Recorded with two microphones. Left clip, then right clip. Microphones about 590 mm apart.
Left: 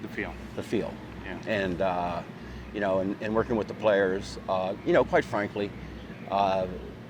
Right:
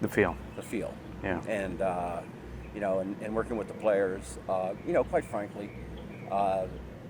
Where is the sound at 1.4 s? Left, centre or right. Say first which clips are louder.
Left 6 dB; left.